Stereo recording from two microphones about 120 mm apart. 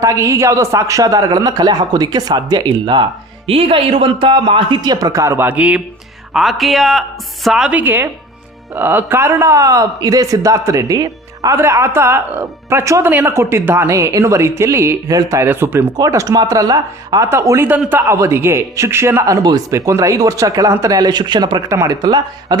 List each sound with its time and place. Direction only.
0.0 s a man's voice: 25° right (ahead or behind)
16.0 s a man's voice: 30° right (ahead or behind)
17.2 s a man's voice: 25° right (ahead or behind)